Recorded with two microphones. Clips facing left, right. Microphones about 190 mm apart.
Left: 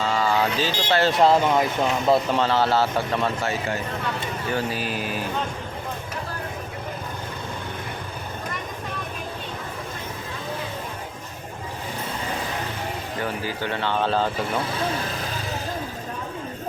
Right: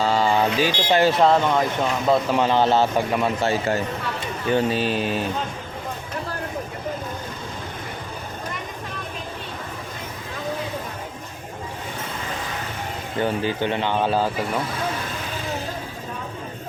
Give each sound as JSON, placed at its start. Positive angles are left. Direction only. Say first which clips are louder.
{"t": 0.0, "sound": "mantra", "louder": "right 3 dB", "side_deg": -30}
{"t": 1.2, "sound": "speech", "louder": "even", "side_deg": 5}
{"t": 2.3, "sound": "a man's voice", "louder": "right 2 dB", "side_deg": -15}
{"t": 3.4, "sound": "a man's voice", "louder": "right 5 dB", "side_deg": -30}
{"t": 13.2, "sound": "speech", "louder": "right 6 dB", "side_deg": -25}